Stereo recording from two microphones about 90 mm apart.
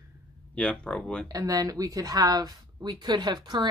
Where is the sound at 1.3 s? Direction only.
45° right (ahead or behind).